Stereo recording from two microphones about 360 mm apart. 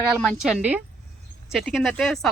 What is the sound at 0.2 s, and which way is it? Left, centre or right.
Speech, centre.